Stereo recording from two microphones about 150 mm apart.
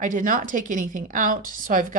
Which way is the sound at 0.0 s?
60° right (ahead or behind).